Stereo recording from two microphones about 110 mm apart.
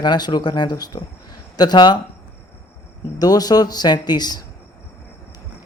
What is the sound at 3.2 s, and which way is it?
Speech, 35° left (ahead or behind).